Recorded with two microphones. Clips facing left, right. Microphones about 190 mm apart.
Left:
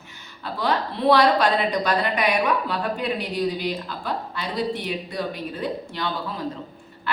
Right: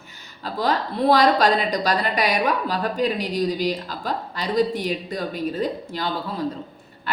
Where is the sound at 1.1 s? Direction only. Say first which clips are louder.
Right 1 dB; 40° right (ahead or behind).